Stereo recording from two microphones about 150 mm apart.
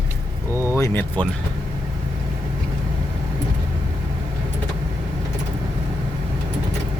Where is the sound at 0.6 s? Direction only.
20° left (ahead or behind).